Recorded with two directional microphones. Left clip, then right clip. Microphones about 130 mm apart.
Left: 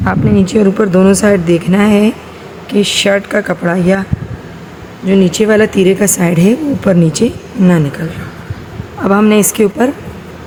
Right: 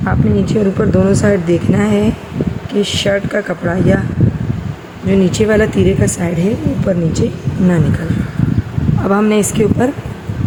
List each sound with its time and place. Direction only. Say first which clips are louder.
0.0 s a woman's voice: left 3 dB; 20° left (ahead or behind)
5.0 s a woman's voice: left 3 dB; 15° left (ahead or behind); by 7.3 s 30° left (ahead or behind)
9.0 s a woman's voice: left 4 dB; 15° left (ahead or behind)